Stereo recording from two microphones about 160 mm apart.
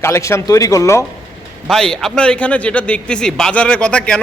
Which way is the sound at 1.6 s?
5° left (ahead or behind).